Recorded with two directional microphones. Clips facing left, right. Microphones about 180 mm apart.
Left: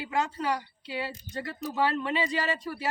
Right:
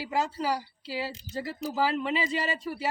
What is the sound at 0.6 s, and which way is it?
Speech, 5° right (ahead or behind).